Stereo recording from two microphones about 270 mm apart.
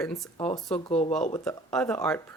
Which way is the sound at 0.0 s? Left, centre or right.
Centre.